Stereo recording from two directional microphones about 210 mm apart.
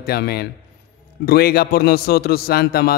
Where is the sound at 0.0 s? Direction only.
50° left (ahead or behind).